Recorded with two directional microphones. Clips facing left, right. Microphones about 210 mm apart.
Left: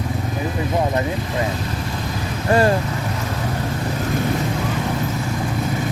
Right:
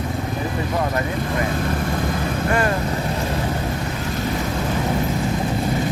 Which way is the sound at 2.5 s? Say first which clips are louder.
Left 6 dB; 30° left (ahead or behind).